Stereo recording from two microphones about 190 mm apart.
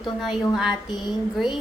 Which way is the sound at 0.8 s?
20° left (ahead or behind).